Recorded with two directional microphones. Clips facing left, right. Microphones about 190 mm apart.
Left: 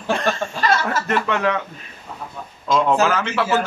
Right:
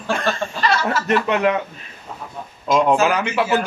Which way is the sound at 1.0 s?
20° right (ahead or behind).